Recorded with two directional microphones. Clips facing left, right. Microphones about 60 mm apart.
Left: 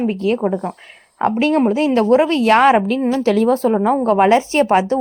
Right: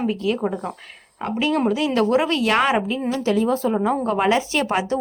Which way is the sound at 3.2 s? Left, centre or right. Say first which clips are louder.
Left 4 dB; left.